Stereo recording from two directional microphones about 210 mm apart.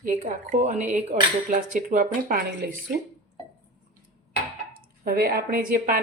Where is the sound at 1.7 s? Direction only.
40° right (ahead or behind).